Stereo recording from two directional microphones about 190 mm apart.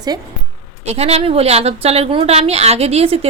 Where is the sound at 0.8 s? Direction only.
35° right (ahead or behind).